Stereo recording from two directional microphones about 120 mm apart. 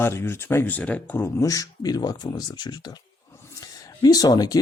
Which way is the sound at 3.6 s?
30° left (ahead or behind).